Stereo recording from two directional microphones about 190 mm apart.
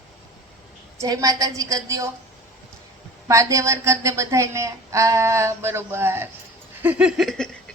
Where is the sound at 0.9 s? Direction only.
20° right (ahead or behind).